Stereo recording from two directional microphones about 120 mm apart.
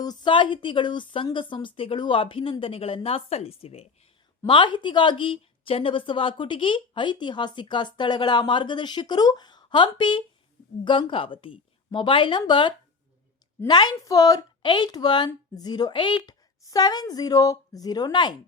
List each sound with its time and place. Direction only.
0.0 s a woman's voice: 35° left (ahead or behind); by 3.8 s 55° left (ahead or behind)
4.4 s a woman's voice: 40° left (ahead or behind)